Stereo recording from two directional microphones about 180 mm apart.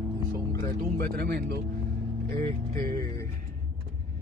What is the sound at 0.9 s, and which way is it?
Speech, 60° right (ahead or behind).